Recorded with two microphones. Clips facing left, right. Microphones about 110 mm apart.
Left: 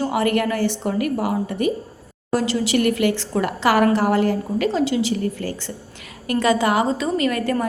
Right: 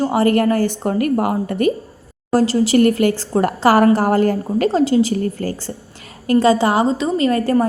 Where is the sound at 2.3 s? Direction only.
40° right (ahead or behind).